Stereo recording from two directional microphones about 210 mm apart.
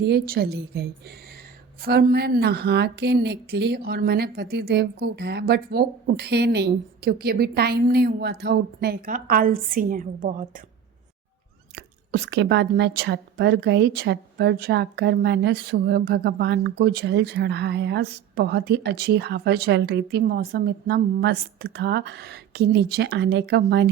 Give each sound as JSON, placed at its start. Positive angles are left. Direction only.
{"t": 0.0, "sound": "speech", "side_deg": -50}
{"t": 11.7, "sound": "speech", "side_deg": -55}